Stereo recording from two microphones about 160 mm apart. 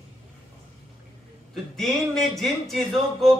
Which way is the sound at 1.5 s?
Centre (ahead or behind).